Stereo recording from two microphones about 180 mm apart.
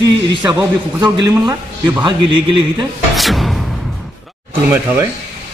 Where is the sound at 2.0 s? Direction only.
25° right (ahead or behind).